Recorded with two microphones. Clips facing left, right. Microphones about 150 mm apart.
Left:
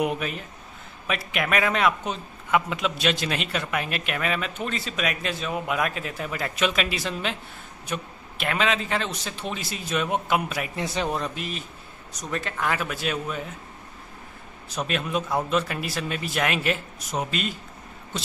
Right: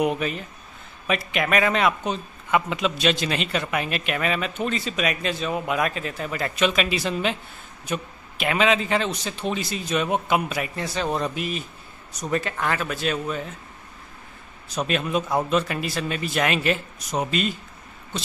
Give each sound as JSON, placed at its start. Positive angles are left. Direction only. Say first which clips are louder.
{"t": 0.0, "sound": "a man's voice", "louder": "right 3 dB", "side_deg": 5}
{"t": 10.8, "sound": "speech", "louder": "left 2 dB", "side_deg": 20}
{"t": 11.1, "sound": "a man's voice", "louder": "right 3 dB", "side_deg": 0}
{"t": 14.8, "sound": "a man's voice", "louder": "right 3 dB", "side_deg": 0}